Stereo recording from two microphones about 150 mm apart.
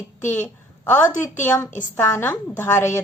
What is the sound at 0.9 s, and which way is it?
A woman's voice, 15° left (ahead or behind).